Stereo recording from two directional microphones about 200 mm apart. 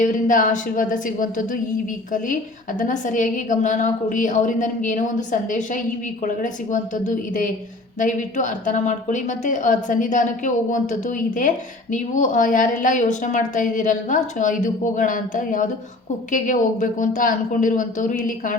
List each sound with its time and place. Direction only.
0.0 s a woman's voice: 40° left (ahead or behind)